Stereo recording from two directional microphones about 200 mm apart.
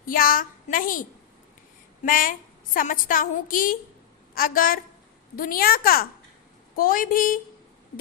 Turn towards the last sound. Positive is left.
turn(degrees=45)  # may be behind; listen again after turning